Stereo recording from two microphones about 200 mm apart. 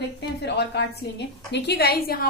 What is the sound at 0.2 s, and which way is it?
A woman's voice, 55° left (ahead or behind).